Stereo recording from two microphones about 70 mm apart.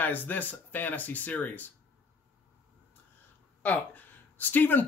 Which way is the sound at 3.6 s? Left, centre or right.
Left.